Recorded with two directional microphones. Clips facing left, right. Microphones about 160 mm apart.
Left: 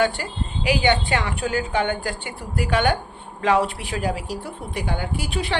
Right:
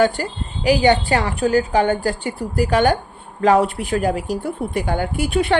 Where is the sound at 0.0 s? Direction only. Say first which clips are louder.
Right 4 dB; 40° right (ahead or behind).